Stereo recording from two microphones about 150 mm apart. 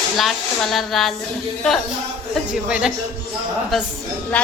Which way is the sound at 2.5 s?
5° right (ahead or behind).